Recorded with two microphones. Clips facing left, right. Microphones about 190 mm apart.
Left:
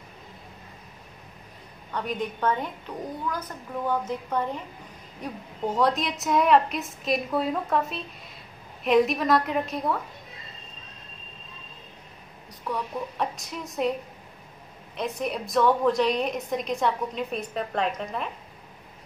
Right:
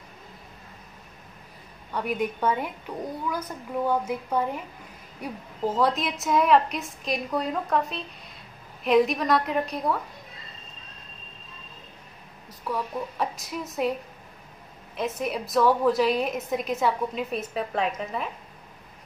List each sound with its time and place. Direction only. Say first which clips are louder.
1.9 s a woman's voice: right 2 dB; 10° right (ahead or behind)
12.6 s a woman's voice: right 1 dB; centre (ahead or behind)
15.0 s a woman's voice: right 1 dB; centre (ahead or behind)